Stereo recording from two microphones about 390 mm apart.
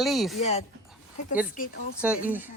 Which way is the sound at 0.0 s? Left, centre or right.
Centre.